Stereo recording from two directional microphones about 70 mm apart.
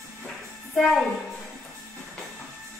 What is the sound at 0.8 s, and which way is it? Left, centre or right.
Speech, centre.